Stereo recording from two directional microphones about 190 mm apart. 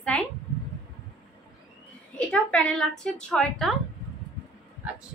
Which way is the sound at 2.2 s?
5° left (ahead or behind).